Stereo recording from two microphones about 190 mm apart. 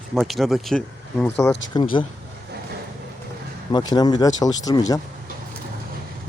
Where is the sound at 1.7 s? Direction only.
25° left (ahead or behind).